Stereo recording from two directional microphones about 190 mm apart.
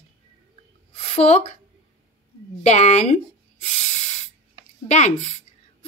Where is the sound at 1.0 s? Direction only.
30° left (ahead or behind).